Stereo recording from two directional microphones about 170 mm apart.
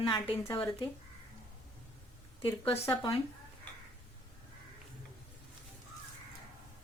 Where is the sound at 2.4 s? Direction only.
30° left (ahead or behind).